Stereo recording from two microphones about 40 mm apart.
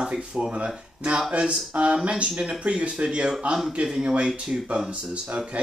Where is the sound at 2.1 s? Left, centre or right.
Right.